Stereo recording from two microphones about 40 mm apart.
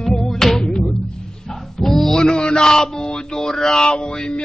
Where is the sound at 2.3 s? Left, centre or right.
Left.